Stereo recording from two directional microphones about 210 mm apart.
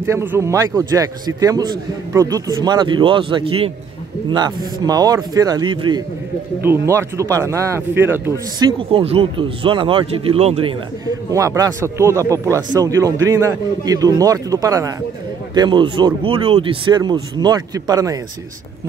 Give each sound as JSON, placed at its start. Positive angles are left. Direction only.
{"t": 0.0, "sound": "a man's voice", "side_deg": -10}
{"t": 8.7, "sound": "a man's voice", "side_deg": -25}